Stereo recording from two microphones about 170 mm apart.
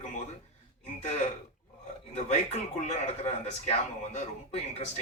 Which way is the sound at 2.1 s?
40° left (ahead or behind).